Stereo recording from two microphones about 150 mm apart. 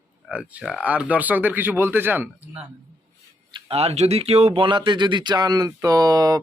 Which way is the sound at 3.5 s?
40° right (ahead or behind).